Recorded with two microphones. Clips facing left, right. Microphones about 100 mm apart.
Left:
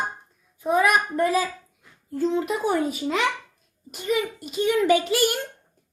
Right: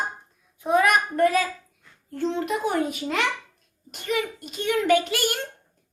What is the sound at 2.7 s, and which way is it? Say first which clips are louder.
Speech: left 2 dB; 5° left (ahead or behind).